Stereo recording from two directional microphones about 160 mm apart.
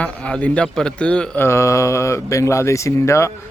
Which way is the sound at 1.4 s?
20° left (ahead or behind).